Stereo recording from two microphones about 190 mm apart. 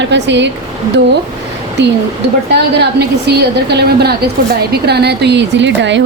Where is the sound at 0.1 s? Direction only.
65° right (ahead or behind).